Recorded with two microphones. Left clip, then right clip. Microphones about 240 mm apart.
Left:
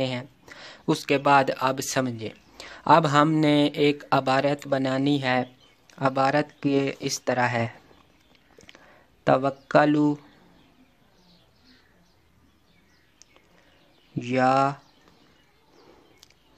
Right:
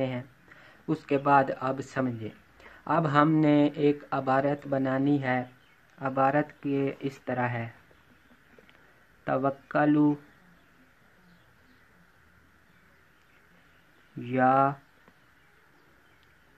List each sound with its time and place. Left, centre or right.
0.0 s speech: left
9.2 s speech: left
14.2 s speech: left